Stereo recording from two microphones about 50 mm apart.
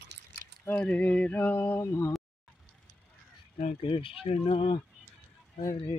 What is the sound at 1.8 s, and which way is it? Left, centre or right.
Speech, left.